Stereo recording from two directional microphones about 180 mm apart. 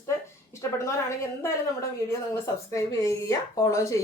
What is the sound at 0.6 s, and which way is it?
Speech, 15° left (ahead or behind).